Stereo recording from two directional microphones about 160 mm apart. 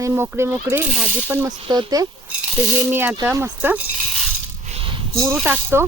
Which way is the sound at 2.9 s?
15° right (ahead or behind).